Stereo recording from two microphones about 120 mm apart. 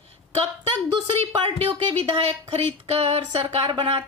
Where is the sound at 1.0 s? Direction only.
50° right (ahead or behind).